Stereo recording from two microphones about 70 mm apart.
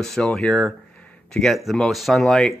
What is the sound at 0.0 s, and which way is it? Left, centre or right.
Speech, centre.